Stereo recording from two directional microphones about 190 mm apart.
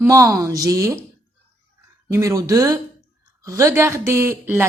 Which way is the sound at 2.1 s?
15° right (ahead or behind).